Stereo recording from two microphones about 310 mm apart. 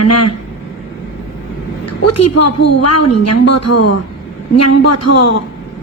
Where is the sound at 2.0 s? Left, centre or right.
Left.